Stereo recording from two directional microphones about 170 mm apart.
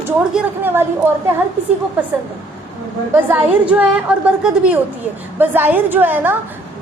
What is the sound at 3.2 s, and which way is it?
Speech, 10° right (ahead or behind).